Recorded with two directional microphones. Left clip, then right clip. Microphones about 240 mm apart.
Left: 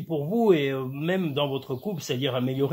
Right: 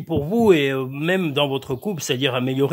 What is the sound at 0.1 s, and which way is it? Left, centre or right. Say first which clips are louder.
Speech: right 5 dB; right.